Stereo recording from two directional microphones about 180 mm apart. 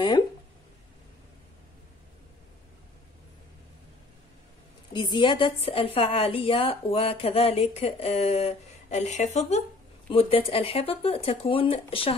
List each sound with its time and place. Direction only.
4.9 s a woman's voice: 25° left (ahead or behind)